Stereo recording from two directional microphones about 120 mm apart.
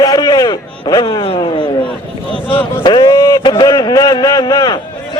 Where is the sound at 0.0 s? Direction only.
30° left (ahead or behind).